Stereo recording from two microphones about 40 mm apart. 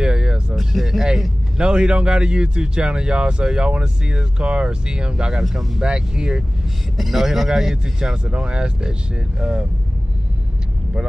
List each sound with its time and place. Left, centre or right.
0.0 s a sound: centre
0.6 s a sound: centre
1.6 s speech: right
5.4 s speech: centre
5.8 s speech: centre
7.0 s speech: centre